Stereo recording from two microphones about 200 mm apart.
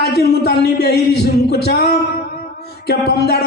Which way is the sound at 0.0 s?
55° left (ahead or behind).